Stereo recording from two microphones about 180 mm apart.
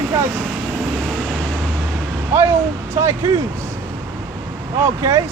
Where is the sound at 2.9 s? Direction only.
15° right (ahead or behind).